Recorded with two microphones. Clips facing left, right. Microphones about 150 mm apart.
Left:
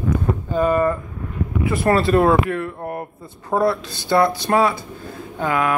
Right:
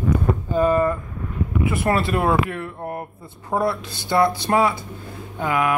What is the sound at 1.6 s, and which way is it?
Speech, 20° right (ahead or behind).